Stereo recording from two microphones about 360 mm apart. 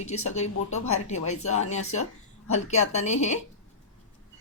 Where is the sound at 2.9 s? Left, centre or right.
Centre.